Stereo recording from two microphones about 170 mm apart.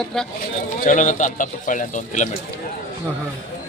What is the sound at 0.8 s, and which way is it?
Speech, 50° left (ahead or behind).